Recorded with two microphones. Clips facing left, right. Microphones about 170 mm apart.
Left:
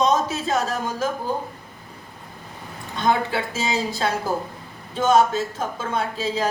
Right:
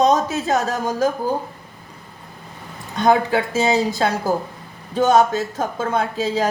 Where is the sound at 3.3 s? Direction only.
40° right (ahead or behind).